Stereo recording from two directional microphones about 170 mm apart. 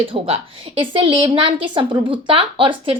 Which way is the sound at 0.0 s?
30° right (ahead or behind).